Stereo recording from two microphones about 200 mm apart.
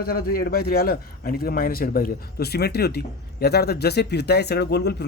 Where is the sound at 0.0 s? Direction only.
50° left (ahead or behind).